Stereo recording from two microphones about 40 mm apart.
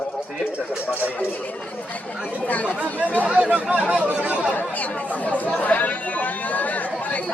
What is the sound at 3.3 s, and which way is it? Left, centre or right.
Speech, right.